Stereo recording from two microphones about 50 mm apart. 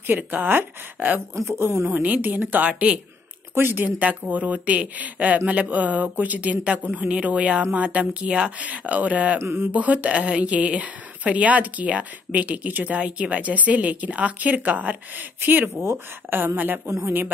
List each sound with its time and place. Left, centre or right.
0.0 s a woman's voice: right
1.3 s speech: right
1.9 s a woman's voice: right
3.5 s a sound: right
3.8 s a woman's voice: right
9.4 s a sound: right
9.7 s a woman's voice: right